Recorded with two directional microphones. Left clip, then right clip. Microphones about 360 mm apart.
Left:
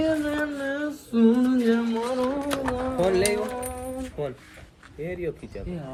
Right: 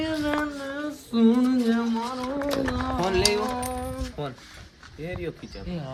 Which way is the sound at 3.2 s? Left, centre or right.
Right.